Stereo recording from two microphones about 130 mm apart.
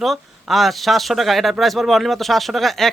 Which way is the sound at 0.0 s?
Centre (ahead or behind).